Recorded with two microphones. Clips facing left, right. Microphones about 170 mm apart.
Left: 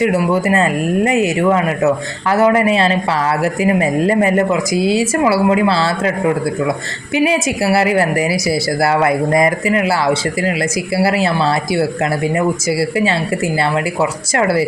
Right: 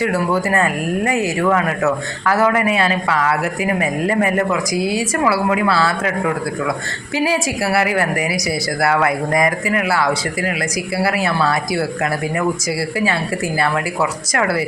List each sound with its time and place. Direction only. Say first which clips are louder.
0.0 s a woman's voice: left 4 dB; 20° left (ahead or behind)